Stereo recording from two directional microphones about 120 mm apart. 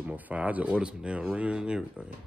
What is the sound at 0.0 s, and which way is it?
Speech, 15° right (ahead or behind).